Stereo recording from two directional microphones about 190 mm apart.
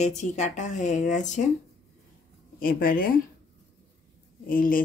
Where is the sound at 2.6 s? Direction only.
50° left (ahead or behind).